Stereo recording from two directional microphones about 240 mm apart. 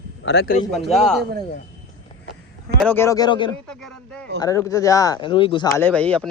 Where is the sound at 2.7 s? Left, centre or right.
Centre.